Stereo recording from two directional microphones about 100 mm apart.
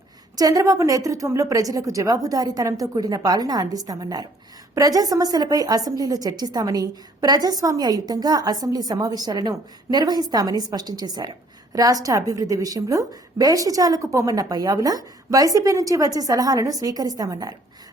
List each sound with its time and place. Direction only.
0.3 s a woman's voice: 40° right (ahead or behind)